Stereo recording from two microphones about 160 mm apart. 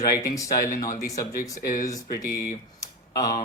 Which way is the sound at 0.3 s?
20° left (ahead or behind).